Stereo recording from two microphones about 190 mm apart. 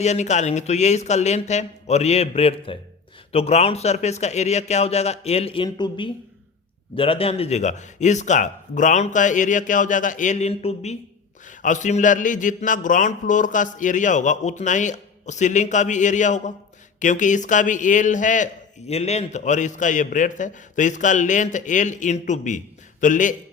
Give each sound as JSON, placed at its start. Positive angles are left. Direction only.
{"t": 0.0, "sound": "a man's voice", "side_deg": 35}